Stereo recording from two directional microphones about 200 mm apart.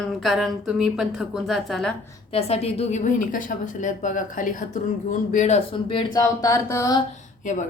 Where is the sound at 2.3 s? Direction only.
30° left (ahead or behind); by 7.0 s 15° left (ahead or behind).